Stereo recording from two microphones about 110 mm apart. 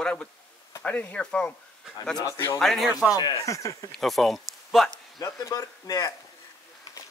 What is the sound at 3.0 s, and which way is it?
Speech, 35° left (ahead or behind).